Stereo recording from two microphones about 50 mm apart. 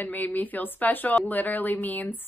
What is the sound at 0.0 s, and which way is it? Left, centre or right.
A woman's voice, left.